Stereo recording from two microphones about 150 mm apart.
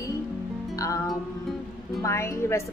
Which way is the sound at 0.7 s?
20° left (ahead or behind).